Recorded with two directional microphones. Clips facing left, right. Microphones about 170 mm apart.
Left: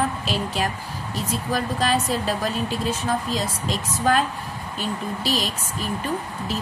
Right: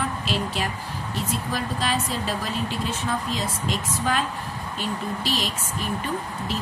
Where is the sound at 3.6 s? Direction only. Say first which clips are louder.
Left 4 dB; 45° left (ahead or behind).